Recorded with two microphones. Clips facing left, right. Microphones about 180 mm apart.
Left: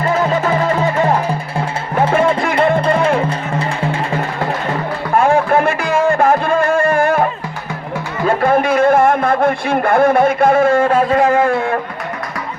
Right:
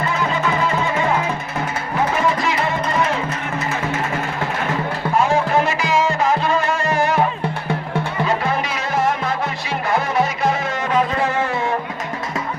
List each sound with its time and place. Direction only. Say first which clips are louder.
0.1 s music: left 9 dB; 45° left (ahead or behind)
2.4 s music: left 7 dB; 55° left (ahead or behind)
5.1 s music: left 5 dB; 55° left (ahead or behind)
8.3 s music: left 12 dB; 50° left (ahead or behind)